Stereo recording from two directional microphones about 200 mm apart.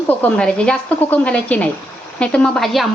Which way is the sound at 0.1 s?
5° left (ahead or behind).